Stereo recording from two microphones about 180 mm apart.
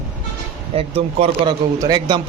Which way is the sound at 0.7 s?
35° right (ahead or behind).